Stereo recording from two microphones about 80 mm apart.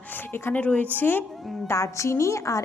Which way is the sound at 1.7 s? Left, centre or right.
Left.